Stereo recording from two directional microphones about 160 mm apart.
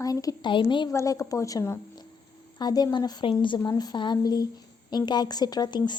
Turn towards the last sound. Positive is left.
turn(degrees=25)  # may be behind; listen again after turning